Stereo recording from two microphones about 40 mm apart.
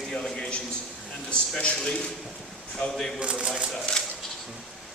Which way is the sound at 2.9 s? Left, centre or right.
Centre.